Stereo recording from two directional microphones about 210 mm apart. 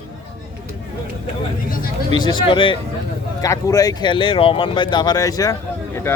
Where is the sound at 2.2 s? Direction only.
20° left (ahead or behind).